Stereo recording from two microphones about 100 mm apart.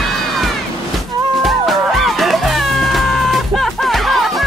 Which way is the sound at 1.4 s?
Centre (ahead or behind).